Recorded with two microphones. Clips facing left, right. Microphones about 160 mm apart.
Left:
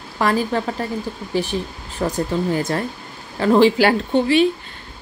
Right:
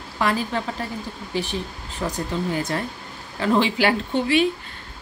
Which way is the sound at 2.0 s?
50° left (ahead or behind).